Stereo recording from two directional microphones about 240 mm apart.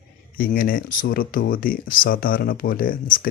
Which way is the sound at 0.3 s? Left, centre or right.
Left.